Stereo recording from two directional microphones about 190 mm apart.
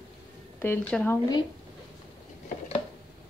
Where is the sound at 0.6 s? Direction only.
10° left (ahead or behind).